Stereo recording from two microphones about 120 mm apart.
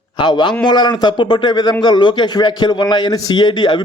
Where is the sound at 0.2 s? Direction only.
40° left (ahead or behind).